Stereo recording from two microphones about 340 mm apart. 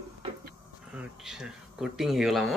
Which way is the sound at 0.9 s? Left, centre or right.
Centre.